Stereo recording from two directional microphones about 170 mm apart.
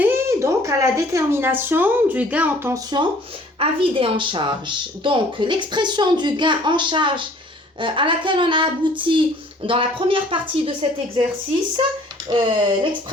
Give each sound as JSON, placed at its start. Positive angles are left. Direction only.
{"t": 0.0, "sound": "speech", "side_deg": -15}
{"t": 3.6, "sound": "speech", "side_deg": -30}
{"t": 12.3, "sound": "speech", "side_deg": -30}